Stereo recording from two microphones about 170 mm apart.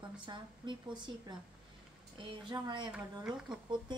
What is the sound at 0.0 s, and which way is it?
A woman's voice, 25° right (ahead or behind).